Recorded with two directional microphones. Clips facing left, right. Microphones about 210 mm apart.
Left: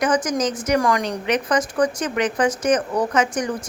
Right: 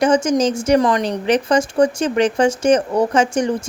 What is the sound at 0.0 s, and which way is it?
Speech, 25° right (ahead or behind).